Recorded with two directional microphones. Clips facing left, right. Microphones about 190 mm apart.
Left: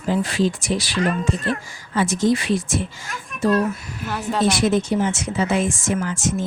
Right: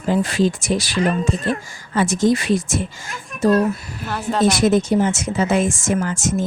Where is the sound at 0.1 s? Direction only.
45° right (ahead or behind).